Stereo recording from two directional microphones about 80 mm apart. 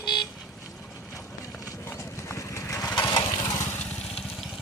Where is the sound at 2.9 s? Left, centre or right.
Left.